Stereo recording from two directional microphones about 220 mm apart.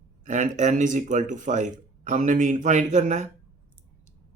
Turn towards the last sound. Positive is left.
turn(degrees=-35)  # may be behind; listen again after turning